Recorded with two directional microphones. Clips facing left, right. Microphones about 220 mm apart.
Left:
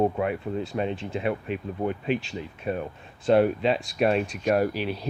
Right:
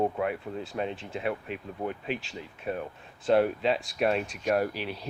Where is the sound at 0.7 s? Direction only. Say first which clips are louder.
Left 5 dB; centre (ahead or behind).